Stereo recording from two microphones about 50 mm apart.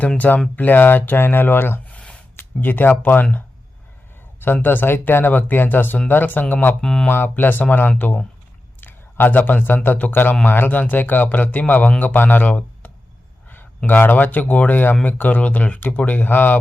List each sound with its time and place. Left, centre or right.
0.5 s speech: left
1.9 s a sound: left
2.4 s speech: left
4.4 s a man's voice: left
6.8 s speech: centre
7.1 s a man's voice: left